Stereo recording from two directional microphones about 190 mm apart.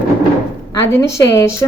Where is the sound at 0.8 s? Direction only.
15° left (ahead or behind).